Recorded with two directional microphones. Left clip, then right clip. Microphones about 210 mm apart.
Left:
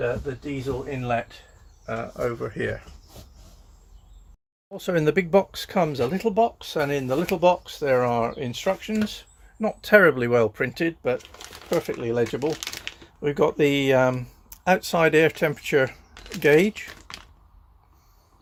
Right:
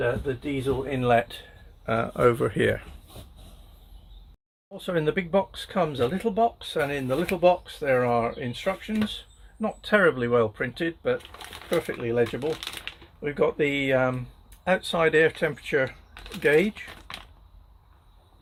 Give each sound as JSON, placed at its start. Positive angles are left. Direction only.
{"t": 0.9, "sound": "speech", "side_deg": -45}
{"t": 1.9, "sound": "speech", "side_deg": -55}
{"t": 4.7, "sound": "speech", "side_deg": 35}
{"t": 12.5, "sound": "typewriter", "side_deg": 10}
{"t": 13.2, "sound": "speech", "side_deg": 40}
{"t": 16.8, "sound": "typing", "side_deg": 0}